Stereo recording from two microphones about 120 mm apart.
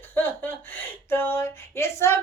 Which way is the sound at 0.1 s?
15° left (ahead or behind).